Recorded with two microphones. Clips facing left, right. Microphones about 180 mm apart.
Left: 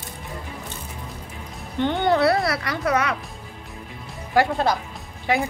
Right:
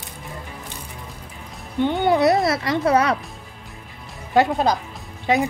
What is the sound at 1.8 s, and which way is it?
Speech, 5° right (ahead or behind).